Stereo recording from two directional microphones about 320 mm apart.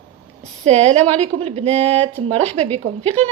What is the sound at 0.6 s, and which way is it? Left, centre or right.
A woman's voice, centre.